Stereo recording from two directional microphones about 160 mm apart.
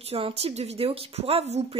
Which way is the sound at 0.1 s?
40° right (ahead or behind).